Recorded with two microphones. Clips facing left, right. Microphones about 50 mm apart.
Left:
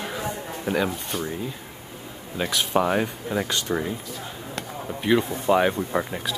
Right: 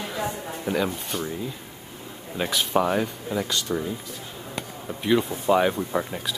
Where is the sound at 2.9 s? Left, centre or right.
Centre.